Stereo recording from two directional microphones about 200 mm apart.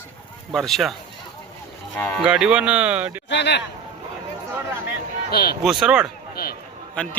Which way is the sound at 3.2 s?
60° left (ahead or behind).